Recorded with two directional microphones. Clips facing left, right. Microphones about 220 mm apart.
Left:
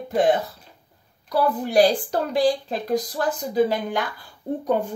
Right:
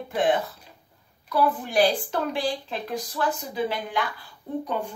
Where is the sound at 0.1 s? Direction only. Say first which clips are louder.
Left 4 dB; 40° left (ahead or behind).